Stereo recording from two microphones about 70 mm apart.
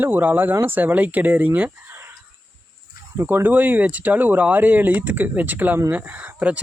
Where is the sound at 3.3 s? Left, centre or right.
Right.